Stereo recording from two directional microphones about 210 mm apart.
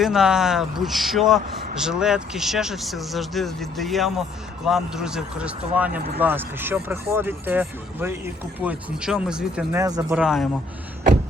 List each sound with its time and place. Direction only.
0.0 s speech: centre (ahead or behind)
9.7 s speech: 15° right (ahead or behind)
10.2 s speech: centre (ahead or behind)